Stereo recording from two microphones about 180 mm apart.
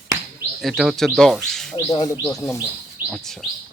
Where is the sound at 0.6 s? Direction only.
Centre (ahead or behind).